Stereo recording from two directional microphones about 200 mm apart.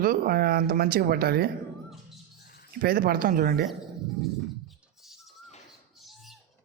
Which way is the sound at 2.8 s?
50° right (ahead or behind).